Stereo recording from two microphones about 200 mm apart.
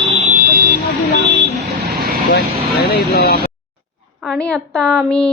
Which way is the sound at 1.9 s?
50° right (ahead or behind).